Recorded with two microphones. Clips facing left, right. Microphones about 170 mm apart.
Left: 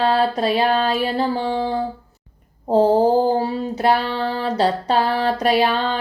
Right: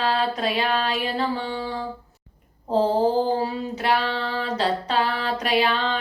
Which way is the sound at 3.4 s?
35° left (ahead or behind).